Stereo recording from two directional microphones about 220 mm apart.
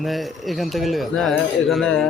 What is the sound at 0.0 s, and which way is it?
Speech, centre (ahead or behind).